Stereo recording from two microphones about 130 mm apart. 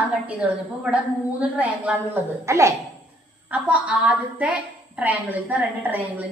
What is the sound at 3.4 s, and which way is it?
A woman's voice, 10° right (ahead or behind).